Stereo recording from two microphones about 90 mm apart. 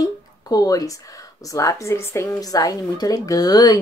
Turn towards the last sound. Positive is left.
turn(degrees=45)  # may be behind; listen again after turning